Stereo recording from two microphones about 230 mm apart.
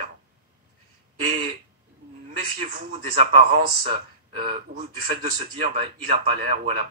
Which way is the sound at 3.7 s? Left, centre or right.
Right.